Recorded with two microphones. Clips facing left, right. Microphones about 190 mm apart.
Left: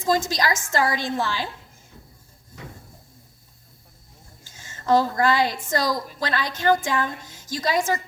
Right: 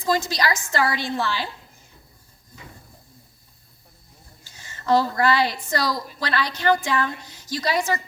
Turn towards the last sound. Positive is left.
turn(degrees=45)  # may be behind; listen again after turning